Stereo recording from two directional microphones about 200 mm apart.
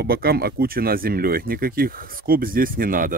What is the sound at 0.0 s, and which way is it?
Speech, 50° right (ahead or behind).